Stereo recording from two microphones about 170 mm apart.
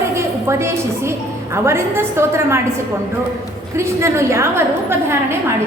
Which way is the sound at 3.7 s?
15° right (ahead or behind).